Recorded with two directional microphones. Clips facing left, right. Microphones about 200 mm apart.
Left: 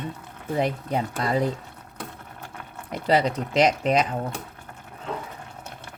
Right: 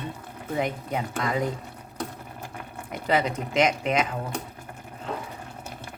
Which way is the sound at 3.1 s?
35° left (ahead or behind).